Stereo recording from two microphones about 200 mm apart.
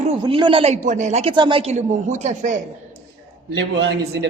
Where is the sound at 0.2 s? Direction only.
25° right (ahead or behind).